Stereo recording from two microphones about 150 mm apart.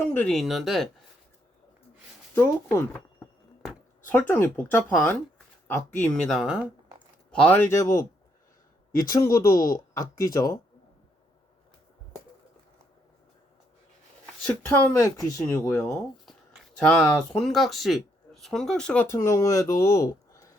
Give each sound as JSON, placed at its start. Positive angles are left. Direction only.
{"t": 0.1, "sound": "speech", "side_deg": 5}
{"t": 2.3, "sound": "speech", "side_deg": 15}
{"t": 6.2, "sound": "speech", "side_deg": -5}
{"t": 7.3, "sound": "speech", "side_deg": 10}
{"t": 9.0, "sound": "speech", "side_deg": 20}
{"t": 14.4, "sound": "speech", "side_deg": 15}
{"t": 15.7, "sound": "speech", "side_deg": 5}
{"t": 19.1, "sound": "speech", "side_deg": 20}